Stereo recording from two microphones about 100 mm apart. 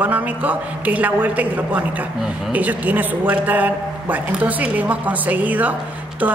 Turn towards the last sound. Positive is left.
turn(degrees=-15)  # may be behind; listen again after turning